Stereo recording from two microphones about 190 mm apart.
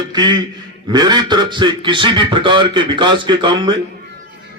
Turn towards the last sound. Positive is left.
turn(degrees=-25)  # may be behind; listen again after turning